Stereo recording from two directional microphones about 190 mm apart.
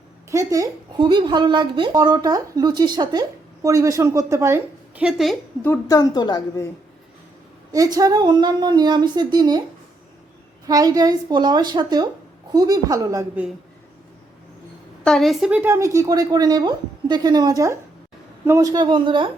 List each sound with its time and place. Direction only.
0.3 s speech: 15° right (ahead or behind); by 5.4 s centre (ahead or behind)
5.6 s a woman's voice: 10° left (ahead or behind)
6.0 s a woman's voice: 20° left (ahead or behind)
7.7 s speech: 20° right (ahead or behind)
10.7 s speech: 20° right (ahead or behind)
15.0 s a woman's voice: centre (ahead or behind); by 19.3 s 25° right (ahead or behind)